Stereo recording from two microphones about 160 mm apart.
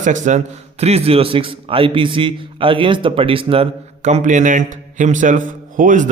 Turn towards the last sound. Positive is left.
turn(degrees=-55)  # may be behind; listen again after turning